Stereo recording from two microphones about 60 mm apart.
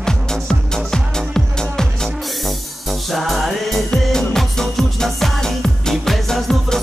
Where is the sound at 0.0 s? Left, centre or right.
Centre.